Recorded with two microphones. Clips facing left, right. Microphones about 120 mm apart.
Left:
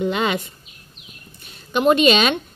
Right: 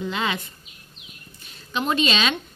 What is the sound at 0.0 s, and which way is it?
Speech, 60° left (ahead or behind).